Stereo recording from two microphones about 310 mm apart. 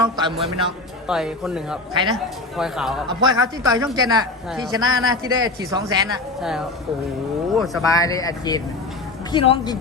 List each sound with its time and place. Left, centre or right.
0.0 s a sound: centre
1.0 s speech: centre
1.9 s a man's voice: centre
2.1 s speech: centre
3.1 s a man's voice: centre
6.4 s speech: centre
7.9 s speech: centre